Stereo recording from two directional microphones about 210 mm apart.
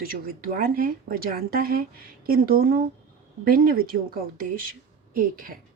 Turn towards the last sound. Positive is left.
turn(degrees=-40)  # may be behind; listen again after turning